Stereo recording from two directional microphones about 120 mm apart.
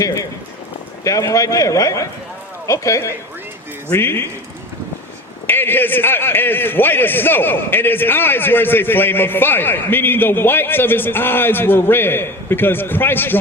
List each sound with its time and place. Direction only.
0.0 s clip-clop: 25° left (ahead or behind)
1.0 s speech: 25° left (ahead or behind)
5.5 s a man's voice: 15° left (ahead or behind)